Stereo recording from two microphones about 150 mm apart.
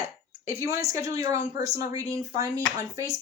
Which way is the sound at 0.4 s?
20° right (ahead or behind).